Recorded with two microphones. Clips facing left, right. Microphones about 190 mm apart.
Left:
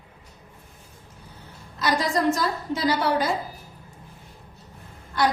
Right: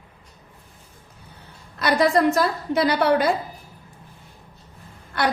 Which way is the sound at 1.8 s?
60° right (ahead or behind).